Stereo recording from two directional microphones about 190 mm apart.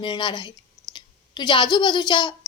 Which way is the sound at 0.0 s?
25° left (ahead or behind).